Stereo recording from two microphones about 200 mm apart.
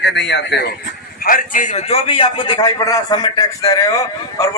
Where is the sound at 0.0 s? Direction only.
60° left (ahead or behind).